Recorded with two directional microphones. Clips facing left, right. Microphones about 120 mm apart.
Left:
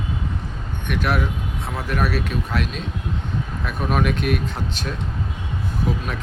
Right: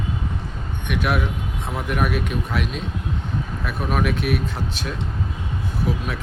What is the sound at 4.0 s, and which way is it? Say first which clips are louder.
Speech: even; 10° right (ahead or behind).